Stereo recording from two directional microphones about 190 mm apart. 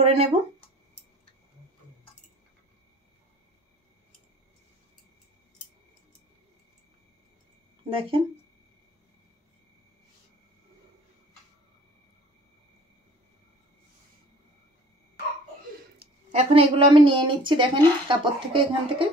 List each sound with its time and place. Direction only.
0.0 s a sound: 35° right (ahead or behind)
7.9 s speech: 30° right (ahead or behind)
16.3 s speech: 30° right (ahead or behind)